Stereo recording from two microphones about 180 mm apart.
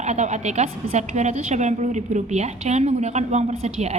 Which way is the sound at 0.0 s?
40° right (ahead or behind).